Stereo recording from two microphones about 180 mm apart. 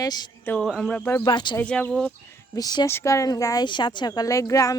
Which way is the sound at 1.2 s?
25° left (ahead or behind).